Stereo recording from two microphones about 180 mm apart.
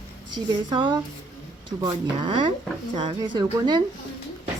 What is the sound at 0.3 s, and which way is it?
Speech, 25° right (ahead or behind).